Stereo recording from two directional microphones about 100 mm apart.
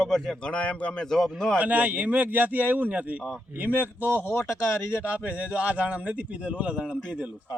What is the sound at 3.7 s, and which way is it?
Speech, 20° left (ahead or behind).